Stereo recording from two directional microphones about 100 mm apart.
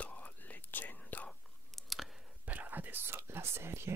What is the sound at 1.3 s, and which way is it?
Chewing, 5° left (ahead or behind).